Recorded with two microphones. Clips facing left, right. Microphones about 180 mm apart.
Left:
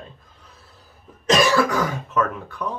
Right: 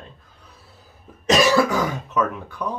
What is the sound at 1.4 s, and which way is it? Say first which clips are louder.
Speech: right 2 dB; centre (ahead or behind).